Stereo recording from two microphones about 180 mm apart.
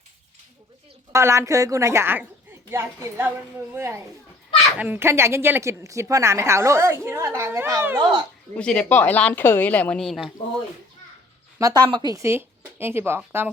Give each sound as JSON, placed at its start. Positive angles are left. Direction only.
{"t": 1.1, "sound": "a woman's voice", "side_deg": -15}
{"t": 8.5, "sound": "a woman's voice", "side_deg": 5}
{"t": 11.6, "sound": "a woman's voice", "side_deg": -25}